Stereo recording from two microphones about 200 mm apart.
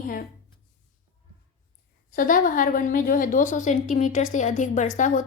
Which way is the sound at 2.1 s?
45° left (ahead or behind).